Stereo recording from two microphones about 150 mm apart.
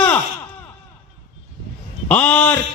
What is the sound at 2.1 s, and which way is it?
Speech, 10° left (ahead or behind).